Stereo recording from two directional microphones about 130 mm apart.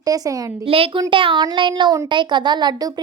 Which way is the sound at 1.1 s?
40° right (ahead or behind).